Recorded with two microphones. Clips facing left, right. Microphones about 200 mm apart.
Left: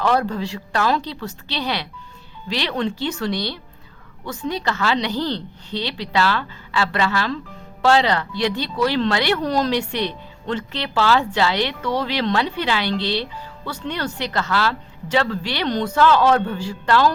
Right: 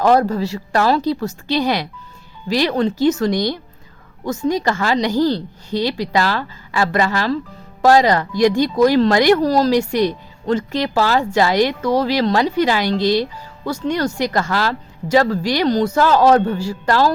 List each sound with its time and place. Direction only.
0.0 s speech: 40° right (ahead or behind)
5.1 s a woman's voice: 10° right (ahead or behind)
5.7 s speech: 40° right (ahead or behind)